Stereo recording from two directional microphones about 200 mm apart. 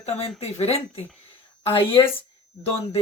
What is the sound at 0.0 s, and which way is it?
A woman's voice, 30° left (ahead or behind).